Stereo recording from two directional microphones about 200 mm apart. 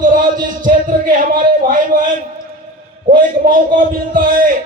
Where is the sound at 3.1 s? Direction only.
45° right (ahead or behind).